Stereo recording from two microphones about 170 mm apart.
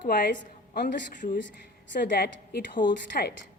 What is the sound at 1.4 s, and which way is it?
A woman's voice, 80° left.